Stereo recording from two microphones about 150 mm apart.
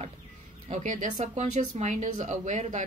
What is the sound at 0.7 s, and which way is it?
Speech, 55° right (ahead or behind).